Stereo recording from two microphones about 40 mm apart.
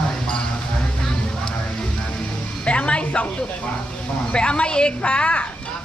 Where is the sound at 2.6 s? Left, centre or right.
Left.